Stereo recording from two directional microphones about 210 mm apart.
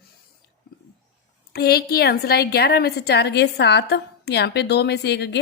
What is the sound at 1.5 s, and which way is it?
A woman's voice, 50° left (ahead or behind).